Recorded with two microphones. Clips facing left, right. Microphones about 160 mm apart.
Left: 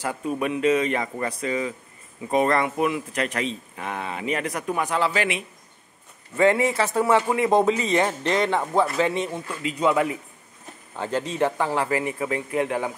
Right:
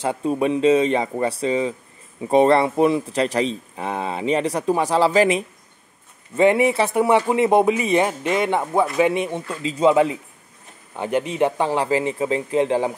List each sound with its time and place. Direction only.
0.0 s speech: 25° right (ahead or behind)
6.3 s speech: 20° right (ahead or behind)
9.6 s speech: 25° right (ahead or behind)